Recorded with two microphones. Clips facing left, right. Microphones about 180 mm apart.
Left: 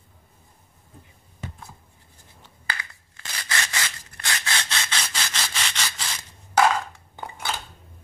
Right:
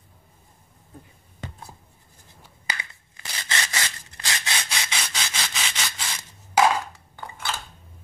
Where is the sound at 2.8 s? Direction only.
20° right (ahead or behind).